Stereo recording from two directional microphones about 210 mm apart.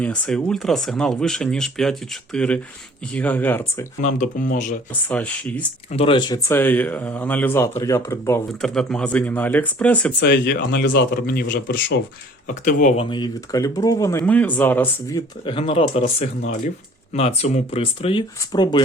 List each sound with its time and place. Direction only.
0.0 s speech: 5° left (ahead or behind)
4.0 s speech: 35° left (ahead or behind)
5.0 s speech: 5° left (ahead or behind)
5.9 s speech: 25° left (ahead or behind)
6.5 s speech: 10° left (ahead or behind)
8.6 s speech: centre (ahead or behind)
10.2 s speech: 55° left (ahead or behind)
12.5 s speech: 35° left (ahead or behind)
13.1 s speech: 20° left (ahead or behind)
15.4 s speech: 25° left (ahead or behind)
17.1 s speech: 30° left (ahead or behind)